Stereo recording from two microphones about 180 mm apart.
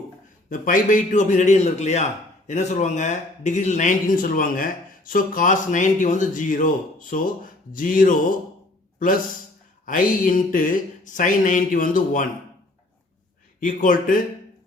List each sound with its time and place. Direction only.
0.5 s speech: 50° left (ahead or behind)
9.8 s speech: 50° left (ahead or behind)
13.6 s speech: 50° left (ahead or behind)